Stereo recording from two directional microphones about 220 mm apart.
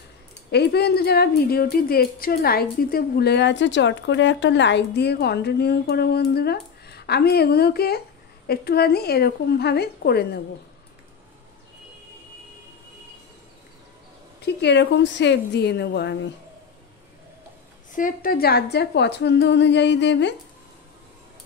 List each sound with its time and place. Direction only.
0.5 s a woman's voice: 50° left (ahead or behind)
14.4 s a woman's voice: 50° left (ahead or behind)
17.9 s a woman's voice: 40° left (ahead or behind)